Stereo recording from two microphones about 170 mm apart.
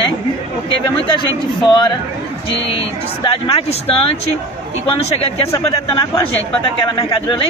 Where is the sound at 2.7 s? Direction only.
30° left (ahead or behind).